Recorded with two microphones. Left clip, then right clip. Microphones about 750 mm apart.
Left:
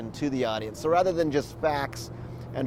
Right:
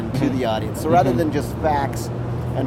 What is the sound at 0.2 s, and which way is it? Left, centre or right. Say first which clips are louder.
Speech: right 6 dB; left.